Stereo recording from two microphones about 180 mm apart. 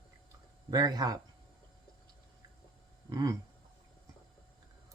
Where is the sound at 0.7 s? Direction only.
20° right (ahead or behind).